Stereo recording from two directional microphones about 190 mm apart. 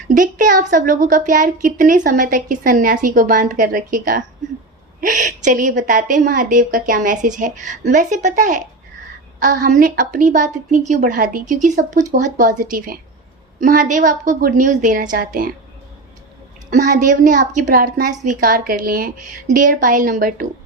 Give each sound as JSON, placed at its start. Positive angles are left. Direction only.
{"t": 0.1, "sound": "a woman's voice", "side_deg": -45}
{"t": 16.6, "sound": "a woman's voice", "side_deg": -45}